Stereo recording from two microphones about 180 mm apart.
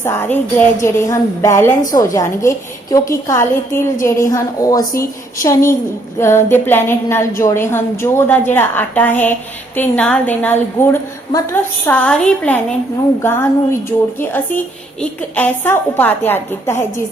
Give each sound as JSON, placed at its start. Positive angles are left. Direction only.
{"t": 0.0, "sound": "a woman's voice", "side_deg": 15}